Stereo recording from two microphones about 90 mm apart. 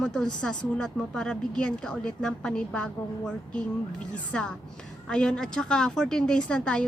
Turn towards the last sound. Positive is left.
turn(degrees=10)  # may be behind; listen again after turning